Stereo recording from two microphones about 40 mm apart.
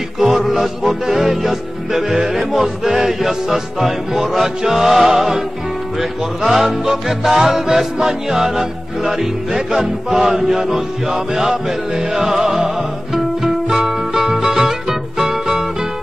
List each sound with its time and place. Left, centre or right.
0.2 s music: centre